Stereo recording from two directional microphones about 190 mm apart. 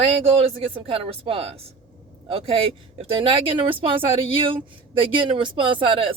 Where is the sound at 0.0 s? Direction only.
30° right (ahead or behind).